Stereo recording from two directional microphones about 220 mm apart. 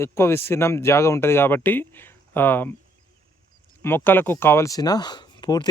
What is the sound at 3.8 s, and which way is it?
Speech, 10° left (ahead or behind).